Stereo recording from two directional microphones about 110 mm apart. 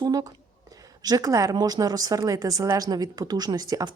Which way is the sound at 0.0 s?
35° right (ahead or behind).